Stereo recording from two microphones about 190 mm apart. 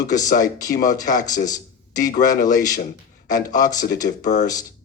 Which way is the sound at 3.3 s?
20° left (ahead or behind).